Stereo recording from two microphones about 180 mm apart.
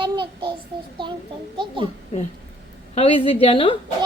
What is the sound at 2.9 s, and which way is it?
Speech, 30° left (ahead or behind).